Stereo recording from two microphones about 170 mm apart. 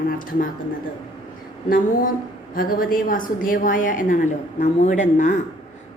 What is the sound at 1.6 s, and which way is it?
A woman's voice, 55° left (ahead or behind).